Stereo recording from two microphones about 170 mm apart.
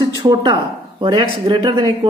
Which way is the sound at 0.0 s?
25° right (ahead or behind).